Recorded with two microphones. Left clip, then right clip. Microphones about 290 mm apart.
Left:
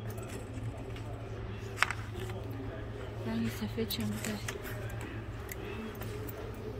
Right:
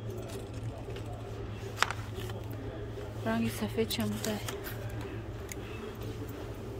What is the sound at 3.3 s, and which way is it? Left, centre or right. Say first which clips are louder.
Speech: right 5 dB; centre.